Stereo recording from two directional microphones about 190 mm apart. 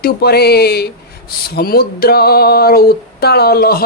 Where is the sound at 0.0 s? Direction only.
55° left (ahead or behind).